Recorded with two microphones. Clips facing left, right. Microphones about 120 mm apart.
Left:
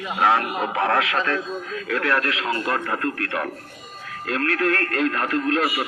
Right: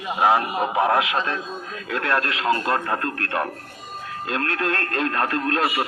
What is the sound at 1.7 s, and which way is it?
A man's voice, 30° right (ahead or behind).